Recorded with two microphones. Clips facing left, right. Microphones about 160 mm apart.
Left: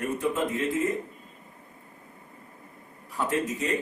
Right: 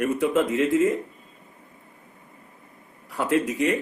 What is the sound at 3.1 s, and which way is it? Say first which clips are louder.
Speech: right 5 dB; 85° right.